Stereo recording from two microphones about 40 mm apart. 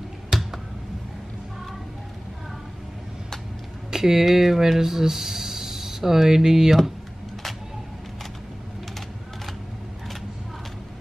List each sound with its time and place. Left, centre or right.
0.3 s finger snapping: centre
3.9 s speech: centre